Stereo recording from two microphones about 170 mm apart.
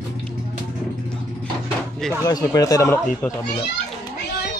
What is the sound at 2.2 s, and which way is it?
Speech, 20° left (ahead or behind).